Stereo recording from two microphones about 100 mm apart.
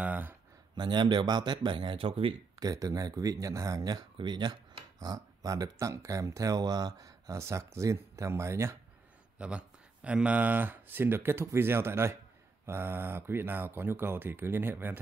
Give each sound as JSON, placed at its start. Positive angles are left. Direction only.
{"t": 0.0, "sound": "speech", "side_deg": -15}
{"t": 0.7, "sound": "speech", "side_deg": -50}
{"t": 2.6, "sound": "speech", "side_deg": -35}
{"t": 9.4, "sound": "speech", "side_deg": -10}